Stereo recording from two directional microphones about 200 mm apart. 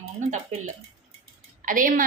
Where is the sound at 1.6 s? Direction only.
40° right (ahead or behind).